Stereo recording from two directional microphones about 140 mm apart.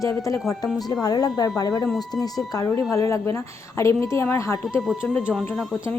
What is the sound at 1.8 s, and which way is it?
Speech, centre (ahead or behind).